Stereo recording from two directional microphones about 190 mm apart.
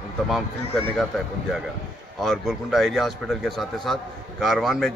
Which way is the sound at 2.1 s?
Centre (ahead or behind).